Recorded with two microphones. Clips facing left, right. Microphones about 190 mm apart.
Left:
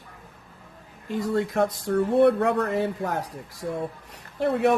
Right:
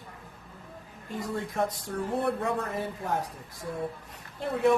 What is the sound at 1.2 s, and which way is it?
Speech, 80° left.